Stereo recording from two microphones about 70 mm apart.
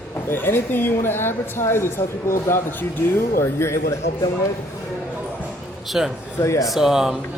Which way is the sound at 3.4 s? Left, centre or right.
Left.